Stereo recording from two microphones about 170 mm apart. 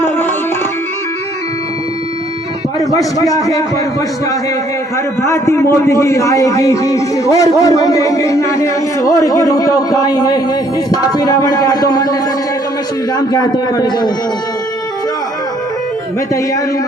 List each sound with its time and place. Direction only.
0.0 s music: 10° left (ahead or behind)
2.7 s a man's voice: 20° left (ahead or behind)
5.2 s a man's voice: 15° left (ahead or behind)
13.1 s a man's voice: 25° left (ahead or behind)